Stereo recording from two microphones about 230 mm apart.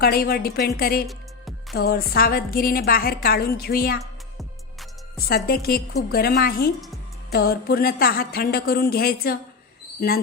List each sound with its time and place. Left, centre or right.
0.0 s a woman's voice: left
5.1 s a woman's voice: left